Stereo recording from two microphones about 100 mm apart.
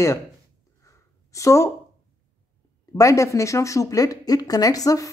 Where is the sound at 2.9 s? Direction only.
35° left (ahead or behind).